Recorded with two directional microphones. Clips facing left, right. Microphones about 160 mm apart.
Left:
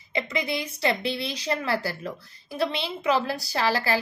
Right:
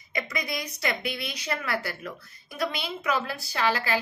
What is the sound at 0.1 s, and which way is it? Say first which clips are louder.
A woman's voice: left 4 dB; 25° left (ahead or behind).